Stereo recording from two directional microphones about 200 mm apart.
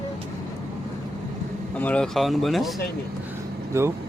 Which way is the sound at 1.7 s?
5° left (ahead or behind).